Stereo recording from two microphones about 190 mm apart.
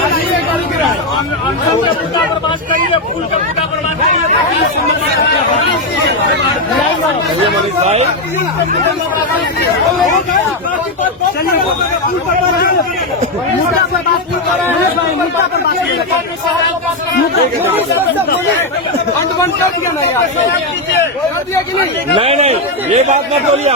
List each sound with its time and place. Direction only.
7.4 s a man's voice: 35° right (ahead or behind)
17.7 s speech: 10° right (ahead or behind)
22.1 s a man's voice: 30° right (ahead or behind)